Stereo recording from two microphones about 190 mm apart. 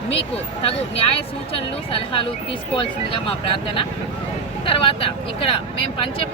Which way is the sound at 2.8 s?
30° left (ahead or behind).